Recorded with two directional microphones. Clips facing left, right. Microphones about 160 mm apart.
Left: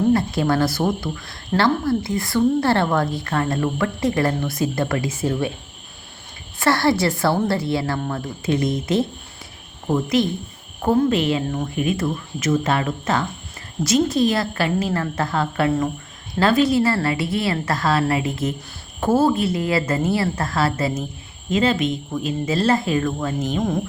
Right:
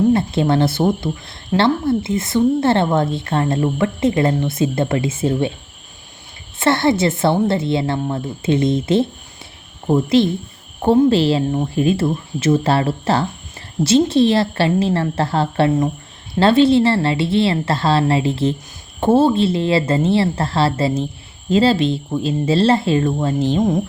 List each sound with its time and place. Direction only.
0.1 s a woman's voice: 25° right (ahead or behind)
6.6 s a woman's voice: 25° right (ahead or behind)